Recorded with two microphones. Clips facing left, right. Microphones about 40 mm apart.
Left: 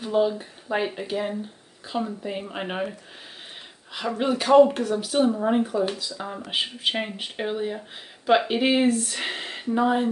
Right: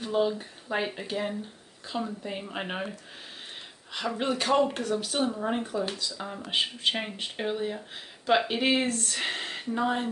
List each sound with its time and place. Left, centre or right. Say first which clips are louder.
0.0 s speech: left 4 dB; centre